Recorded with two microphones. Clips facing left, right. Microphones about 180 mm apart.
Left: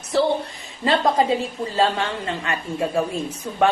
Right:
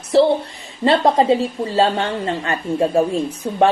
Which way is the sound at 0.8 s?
35° right (ahead or behind).